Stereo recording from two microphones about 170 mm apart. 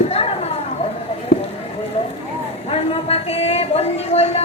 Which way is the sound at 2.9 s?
35° left (ahead or behind).